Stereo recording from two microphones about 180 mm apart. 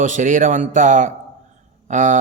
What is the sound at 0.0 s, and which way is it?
Speech, 45° right (ahead or behind).